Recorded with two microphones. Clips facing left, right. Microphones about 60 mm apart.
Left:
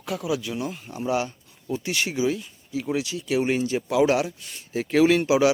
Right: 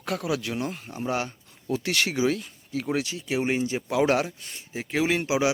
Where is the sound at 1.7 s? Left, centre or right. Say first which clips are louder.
Right 1 dB; right.